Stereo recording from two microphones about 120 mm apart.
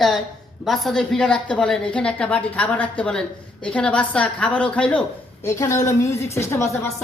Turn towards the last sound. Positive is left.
turn(degrees=20)  # may be behind; listen again after turning